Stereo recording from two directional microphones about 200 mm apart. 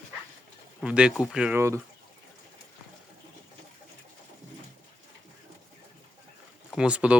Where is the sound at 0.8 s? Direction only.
5° right (ahead or behind).